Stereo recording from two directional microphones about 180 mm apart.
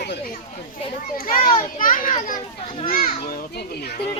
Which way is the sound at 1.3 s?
50° left (ahead or behind).